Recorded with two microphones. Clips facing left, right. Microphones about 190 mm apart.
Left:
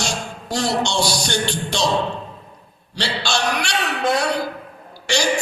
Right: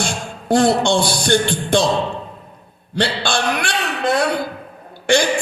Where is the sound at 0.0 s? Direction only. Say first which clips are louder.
Right 2 dB; 55° right (ahead or behind).